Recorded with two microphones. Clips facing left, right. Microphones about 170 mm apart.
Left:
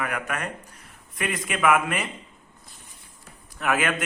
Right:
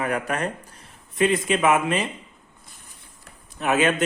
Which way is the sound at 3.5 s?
25° right (ahead or behind).